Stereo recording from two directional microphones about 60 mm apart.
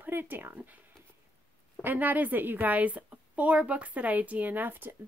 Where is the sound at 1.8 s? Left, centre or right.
Right.